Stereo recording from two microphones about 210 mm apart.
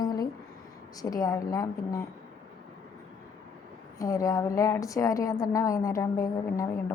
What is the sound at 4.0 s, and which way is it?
A woman's voice, 15° left (ahead or behind).